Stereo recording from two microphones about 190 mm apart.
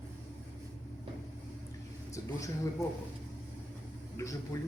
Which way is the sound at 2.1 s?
15° left (ahead or behind).